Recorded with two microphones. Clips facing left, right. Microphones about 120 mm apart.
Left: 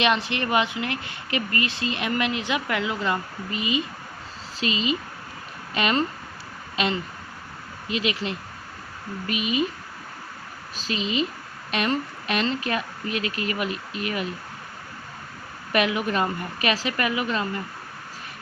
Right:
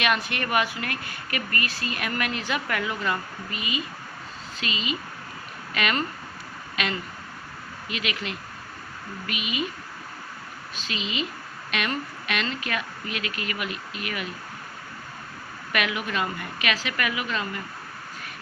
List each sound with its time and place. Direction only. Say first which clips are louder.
0.0 s a woman's voice: left 3 dB; 25° left (ahead or behind)
10.8 s speech: left 5 dB; 35° left (ahead or behind)
15.7 s speech: left 5 dB; 30° left (ahead or behind)